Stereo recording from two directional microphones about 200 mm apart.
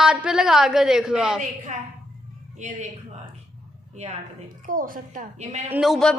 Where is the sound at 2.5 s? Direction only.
35° right (ahead or behind).